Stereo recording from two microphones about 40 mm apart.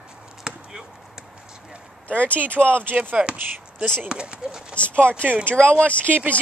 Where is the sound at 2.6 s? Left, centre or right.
Right.